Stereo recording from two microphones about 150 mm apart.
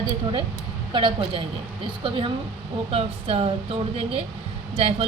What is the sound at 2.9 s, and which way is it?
Speech, 40° right (ahead or behind).